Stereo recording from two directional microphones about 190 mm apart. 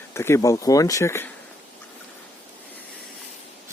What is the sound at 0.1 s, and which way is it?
Speech, 15° left (ahead or behind).